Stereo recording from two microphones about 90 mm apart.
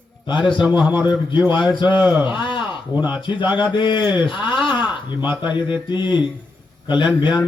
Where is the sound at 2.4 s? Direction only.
60° left (ahead or behind).